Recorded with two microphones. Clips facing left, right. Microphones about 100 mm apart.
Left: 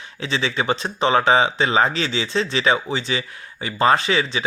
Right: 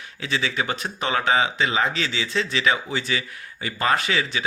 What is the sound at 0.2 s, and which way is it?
Speech, 30° left (ahead or behind).